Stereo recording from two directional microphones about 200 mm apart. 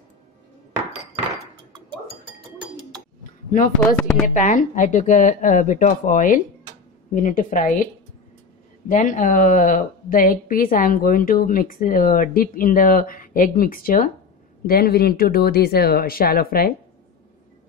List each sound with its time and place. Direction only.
3.3 s a sound: 40° left (ahead or behind)
3.8 s speech: 5° left (ahead or behind)
4.3 s a woman's voice: 40° left (ahead or behind)